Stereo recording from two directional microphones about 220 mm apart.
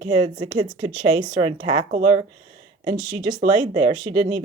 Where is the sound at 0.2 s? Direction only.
20° right (ahead or behind).